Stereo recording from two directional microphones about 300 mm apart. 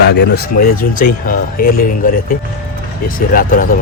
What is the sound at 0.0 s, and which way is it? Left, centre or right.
Speech, left.